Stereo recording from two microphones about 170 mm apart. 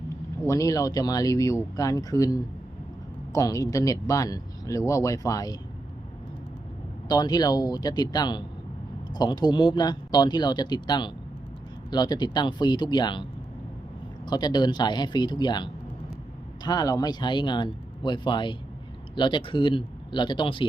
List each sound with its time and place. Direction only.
0.4 s speech: 20° left (ahead or behind)
7.1 s speech: 25° left (ahead or behind)
14.3 s speech: 25° left (ahead or behind)